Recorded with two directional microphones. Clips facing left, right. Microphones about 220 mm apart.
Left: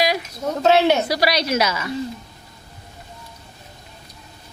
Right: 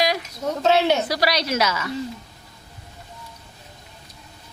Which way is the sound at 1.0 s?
10° left (ahead or behind).